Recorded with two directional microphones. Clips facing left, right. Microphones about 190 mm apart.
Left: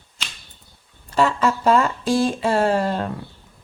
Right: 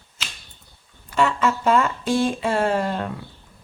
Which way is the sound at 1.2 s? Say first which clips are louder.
Left 1 dB; 35° left (ahead or behind).